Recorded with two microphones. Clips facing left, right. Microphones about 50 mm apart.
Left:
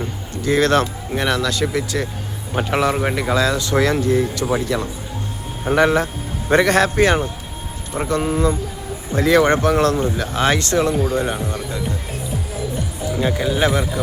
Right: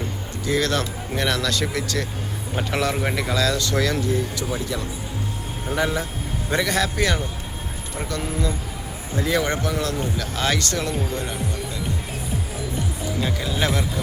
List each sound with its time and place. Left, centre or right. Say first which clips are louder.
0.4 s speech: left 7 dB; left
1.1 s speech: left 3 dB; centre
2.6 s speech: left 5 dB; left
4.4 s a man's voice: left 7 dB; left
6.5 s a man's voice: left 8 dB; left
9.1 s speech: left 8 dB; left
9.4 s a man's voice: left 9 dB; left
10.2 s speech: left 5 dB; left
13.1 s speech: left 7 dB; left